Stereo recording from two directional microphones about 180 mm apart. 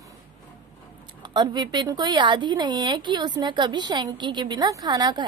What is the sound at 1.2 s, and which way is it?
Speech, 25° right (ahead or behind).